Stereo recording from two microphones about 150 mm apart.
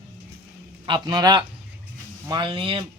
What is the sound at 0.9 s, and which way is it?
A man's voice, 30° right (ahead or behind).